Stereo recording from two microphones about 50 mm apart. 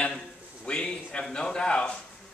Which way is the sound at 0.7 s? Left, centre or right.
Centre.